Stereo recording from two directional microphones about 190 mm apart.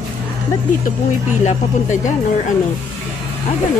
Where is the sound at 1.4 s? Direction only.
40° left (ahead or behind).